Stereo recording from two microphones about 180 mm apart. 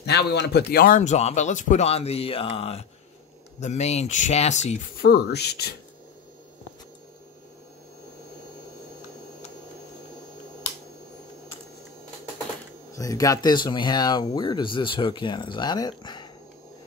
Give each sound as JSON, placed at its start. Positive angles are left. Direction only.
{"t": 0.0, "sound": "speech", "side_deg": 65}
{"t": 4.9, "sound": "speech", "side_deg": 60}
{"t": 12.9, "sound": "speech", "side_deg": 20}